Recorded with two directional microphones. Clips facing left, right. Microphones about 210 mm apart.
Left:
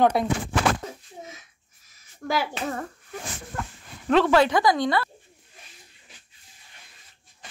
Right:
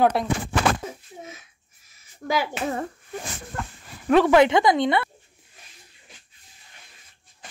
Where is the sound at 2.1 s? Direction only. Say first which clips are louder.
Right 1 dB; centre (ahead or behind).